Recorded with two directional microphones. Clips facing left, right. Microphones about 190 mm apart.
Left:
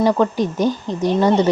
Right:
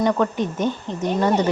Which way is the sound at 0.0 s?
30° left (ahead or behind).